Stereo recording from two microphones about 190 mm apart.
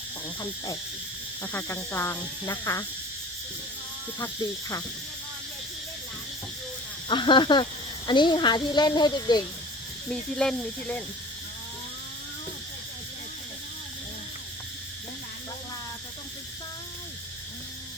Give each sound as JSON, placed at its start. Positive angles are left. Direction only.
{"t": 0.3, "sound": "speech", "side_deg": 20}
{"t": 7.1, "sound": "speech", "side_deg": 25}
{"t": 10.1, "sound": "speech", "side_deg": 5}